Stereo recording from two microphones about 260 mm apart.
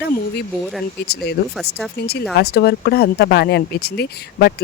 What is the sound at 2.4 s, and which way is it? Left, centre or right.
Speech, left.